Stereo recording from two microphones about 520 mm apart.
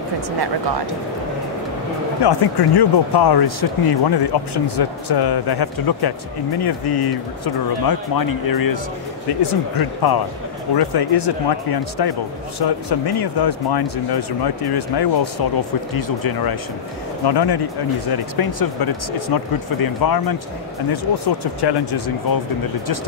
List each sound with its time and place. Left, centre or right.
2.2 s speech: left
17.2 s speech: left